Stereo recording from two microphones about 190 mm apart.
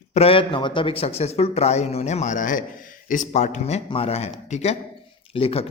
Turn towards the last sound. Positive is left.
turn(degrees=30)  # may be behind; listen again after turning